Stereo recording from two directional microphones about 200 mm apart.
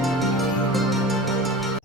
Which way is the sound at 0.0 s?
Centre (ahead or behind).